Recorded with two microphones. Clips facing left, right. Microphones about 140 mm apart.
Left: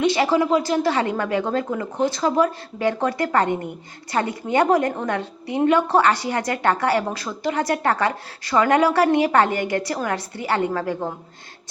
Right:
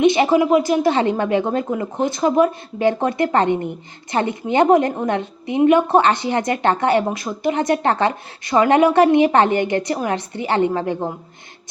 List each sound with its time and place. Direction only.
0.0 s a woman's voice: 20° right (ahead or behind)